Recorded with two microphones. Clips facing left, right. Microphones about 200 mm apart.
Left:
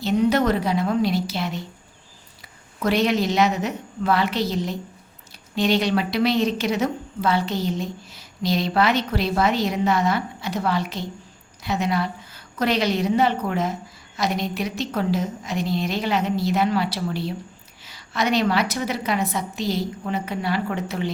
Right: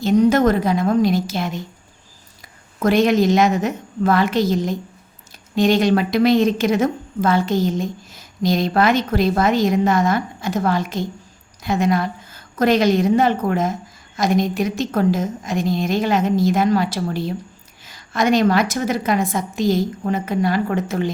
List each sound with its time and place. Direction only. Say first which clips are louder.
0.0 s a woman's voice: right 5 dB; 45° right (ahead or behind)
2.8 s a woman's voice: right 5 dB; 50° right (ahead or behind)